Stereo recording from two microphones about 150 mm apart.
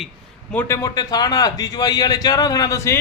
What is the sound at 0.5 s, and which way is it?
A man's voice, 20° left (ahead or behind).